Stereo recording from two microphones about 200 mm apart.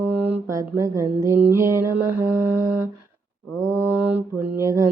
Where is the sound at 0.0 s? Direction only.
10° right (ahead or behind).